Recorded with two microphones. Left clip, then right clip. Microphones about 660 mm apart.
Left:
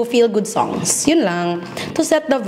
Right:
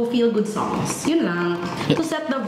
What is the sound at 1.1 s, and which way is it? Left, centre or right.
A woman's voice, left.